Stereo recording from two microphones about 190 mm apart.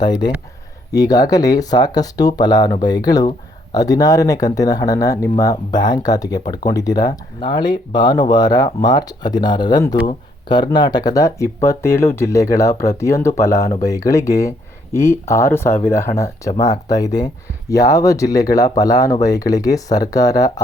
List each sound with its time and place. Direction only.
0.0 s speech: 20° left (ahead or behind)